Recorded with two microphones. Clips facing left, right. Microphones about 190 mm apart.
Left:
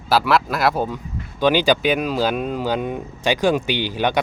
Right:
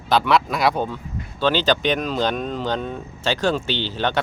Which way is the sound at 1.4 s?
15° left (ahead or behind).